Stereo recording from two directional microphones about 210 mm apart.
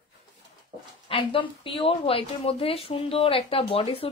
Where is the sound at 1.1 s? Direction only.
25° left (ahead or behind).